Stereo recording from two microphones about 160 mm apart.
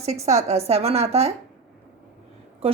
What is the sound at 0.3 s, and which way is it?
Speech, 40° right (ahead or behind).